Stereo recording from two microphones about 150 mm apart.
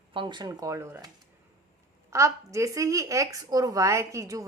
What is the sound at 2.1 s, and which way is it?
Speech, 20° right (ahead or behind).